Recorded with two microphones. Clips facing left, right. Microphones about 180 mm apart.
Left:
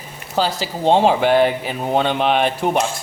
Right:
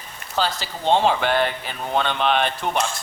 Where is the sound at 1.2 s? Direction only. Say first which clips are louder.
Left 7 dB; 5° left (ahead or behind).